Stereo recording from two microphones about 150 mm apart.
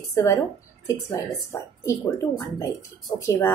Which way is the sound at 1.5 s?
20° left (ahead or behind).